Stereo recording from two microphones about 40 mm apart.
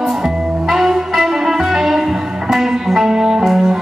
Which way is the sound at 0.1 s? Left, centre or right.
Centre.